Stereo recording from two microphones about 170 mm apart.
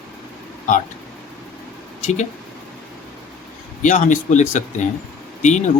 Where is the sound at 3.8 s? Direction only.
50° left (ahead or behind).